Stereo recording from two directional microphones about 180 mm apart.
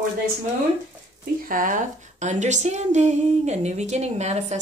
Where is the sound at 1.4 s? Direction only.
50° right (ahead or behind).